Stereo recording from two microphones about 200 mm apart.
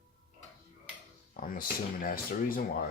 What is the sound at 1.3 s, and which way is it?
Speech, 45° left (ahead or behind).